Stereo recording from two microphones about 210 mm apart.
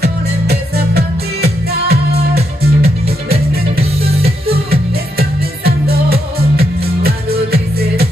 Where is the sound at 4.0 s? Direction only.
30° right (ahead or behind).